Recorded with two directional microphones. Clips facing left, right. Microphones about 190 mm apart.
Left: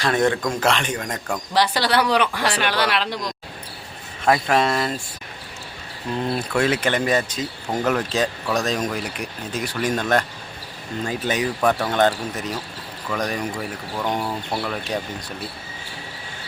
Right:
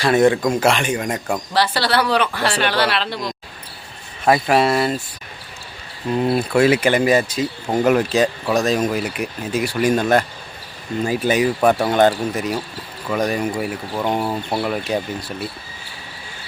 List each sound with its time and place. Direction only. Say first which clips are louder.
0.0 s speech: right 5 dB; 10° right (ahead or behind)
1.5 s speech: even; 15° left (ahead or behind)
4.3 s speech: right 3 dB; 5° right (ahead or behind)
6.2 s speech: right 6 dB; 10° right (ahead or behind)
14.0 s speech: right 4 dB; 20° right (ahead or behind)